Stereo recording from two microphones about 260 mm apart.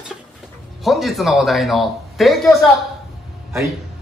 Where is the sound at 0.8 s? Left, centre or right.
Centre.